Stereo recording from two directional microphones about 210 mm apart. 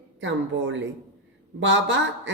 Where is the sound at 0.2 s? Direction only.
60° right (ahead or behind).